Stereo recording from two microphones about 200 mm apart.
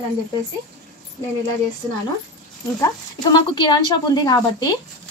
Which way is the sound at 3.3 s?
20° left (ahead or behind).